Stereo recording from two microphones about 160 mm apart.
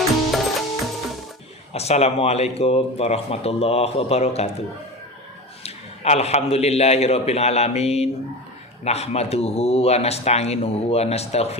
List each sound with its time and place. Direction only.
0.3 s music: centre (ahead or behind)
1.7 s speech: 40° left (ahead or behind)
5.6 s speech: 40° left (ahead or behind)